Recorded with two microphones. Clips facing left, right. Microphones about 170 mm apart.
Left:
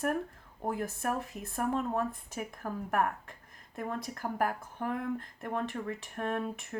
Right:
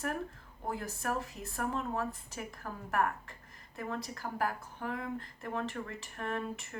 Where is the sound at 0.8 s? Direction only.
50° left (ahead or behind).